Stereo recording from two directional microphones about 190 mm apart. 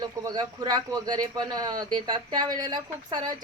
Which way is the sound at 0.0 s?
20° right (ahead or behind).